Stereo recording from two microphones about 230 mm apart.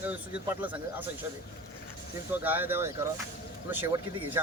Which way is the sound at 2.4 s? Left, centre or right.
Centre.